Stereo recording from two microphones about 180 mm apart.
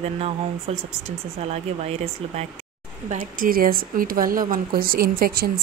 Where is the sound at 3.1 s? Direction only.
50° right (ahead or behind).